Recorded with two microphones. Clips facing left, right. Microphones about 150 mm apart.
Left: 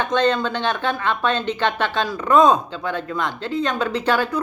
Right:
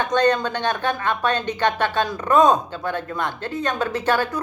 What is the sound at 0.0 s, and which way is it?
A woman's voice, 45° right (ahead or behind).